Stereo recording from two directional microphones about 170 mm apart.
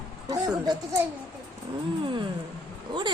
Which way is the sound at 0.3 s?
25° right (ahead or behind).